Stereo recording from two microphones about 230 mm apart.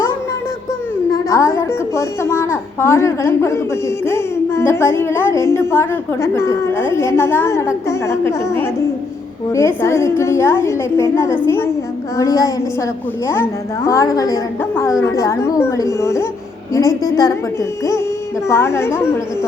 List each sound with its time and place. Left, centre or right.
1.1 s a woman's voice: centre
18.4 s a woman's voice: centre